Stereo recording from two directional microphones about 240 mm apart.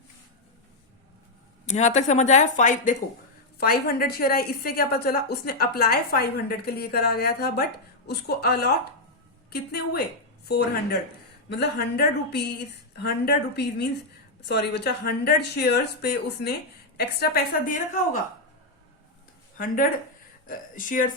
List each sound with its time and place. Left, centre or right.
1.6 s a woman's voice: left
11.4 s a woman's voice: left
19.5 s a woman's voice: left